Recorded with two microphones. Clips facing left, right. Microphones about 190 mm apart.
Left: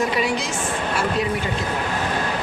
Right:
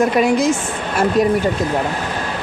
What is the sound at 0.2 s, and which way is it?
Speech, 45° right (ahead or behind).